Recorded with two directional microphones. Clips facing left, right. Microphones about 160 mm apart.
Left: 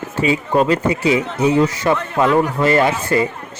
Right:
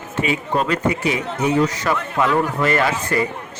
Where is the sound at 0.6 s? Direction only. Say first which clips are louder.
Left 5 dB; 30° left (ahead or behind).